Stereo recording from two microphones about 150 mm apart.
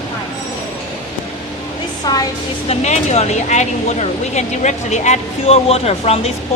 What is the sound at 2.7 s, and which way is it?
Speech, 50° left (ahead or behind).